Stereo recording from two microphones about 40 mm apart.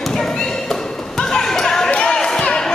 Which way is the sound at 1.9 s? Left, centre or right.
Centre.